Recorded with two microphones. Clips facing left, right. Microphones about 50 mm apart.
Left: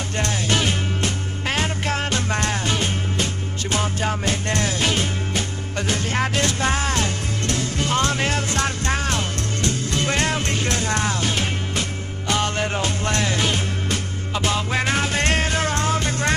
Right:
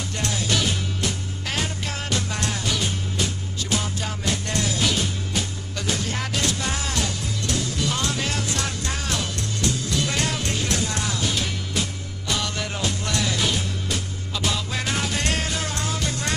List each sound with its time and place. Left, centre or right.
0.2 s music: left